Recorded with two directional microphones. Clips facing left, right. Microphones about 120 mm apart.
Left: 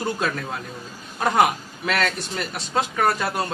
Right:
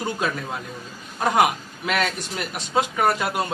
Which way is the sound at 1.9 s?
5° right (ahead or behind).